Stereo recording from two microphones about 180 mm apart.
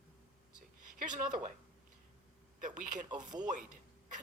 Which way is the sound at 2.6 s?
45° right (ahead or behind).